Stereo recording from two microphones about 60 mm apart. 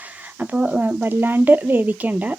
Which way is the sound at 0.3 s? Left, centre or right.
Right.